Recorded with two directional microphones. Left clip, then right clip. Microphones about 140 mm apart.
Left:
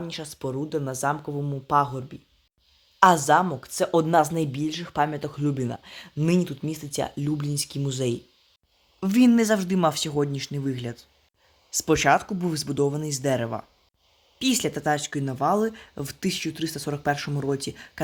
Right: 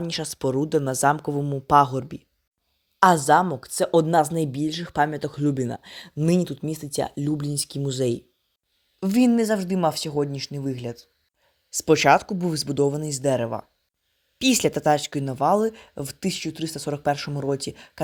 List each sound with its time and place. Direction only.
0.0 s speech: 50° right (ahead or behind)
1.4 s speech: 30° right (ahead or behind)
1.6 s speech: 50° right (ahead or behind)
3.0 s speech: 25° right (ahead or behind)
11.7 s speech: 35° right (ahead or behind)
14.3 s speech: 40° right (ahead or behind)